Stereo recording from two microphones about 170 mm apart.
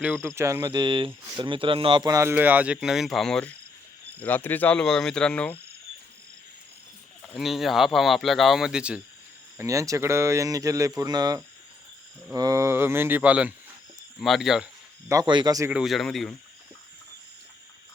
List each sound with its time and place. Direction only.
0.0 s speech: 10° right (ahead or behind); by 5.5 s 5° left (ahead or behind)
7.2 s speech: 5° left (ahead or behind)
9.6 s speech: 20° right (ahead or behind); by 14.7 s centre (ahead or behind)
15.1 s speech: 25° right (ahead or behind)
15.7 s speech: centre (ahead or behind)